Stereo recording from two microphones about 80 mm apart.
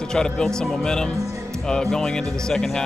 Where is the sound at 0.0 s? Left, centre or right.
Centre.